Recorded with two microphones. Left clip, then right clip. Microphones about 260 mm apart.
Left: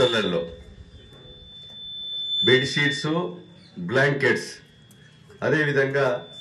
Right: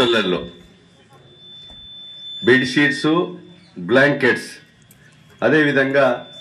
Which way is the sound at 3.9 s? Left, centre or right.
Right.